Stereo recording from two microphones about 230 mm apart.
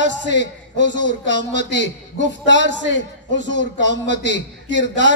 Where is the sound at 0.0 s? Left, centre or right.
Left.